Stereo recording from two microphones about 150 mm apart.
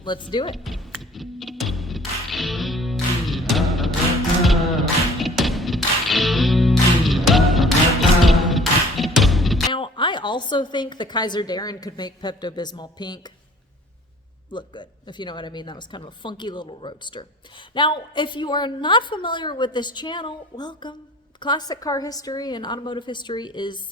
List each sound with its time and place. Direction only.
0.0 s a woman's voice: 30° left (ahead or behind)
0.5 s music: centre (ahead or behind)
9.7 s a woman's voice: 35° left (ahead or behind)
14.5 s a woman's voice: 30° left (ahead or behind)